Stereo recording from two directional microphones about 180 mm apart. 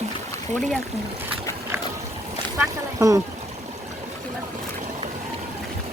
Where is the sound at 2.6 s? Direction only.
20° right (ahead or behind).